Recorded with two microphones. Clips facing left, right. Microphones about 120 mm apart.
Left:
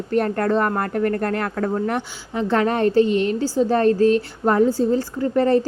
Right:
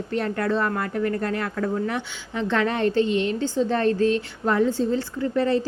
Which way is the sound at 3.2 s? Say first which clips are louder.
Left 4 dB; 40° left (ahead or behind).